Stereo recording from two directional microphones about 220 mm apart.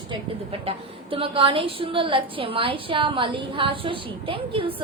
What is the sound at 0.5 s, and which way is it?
A woman's voice, 25° right (ahead or behind).